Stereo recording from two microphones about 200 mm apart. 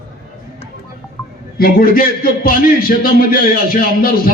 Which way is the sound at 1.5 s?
45° left (ahead or behind).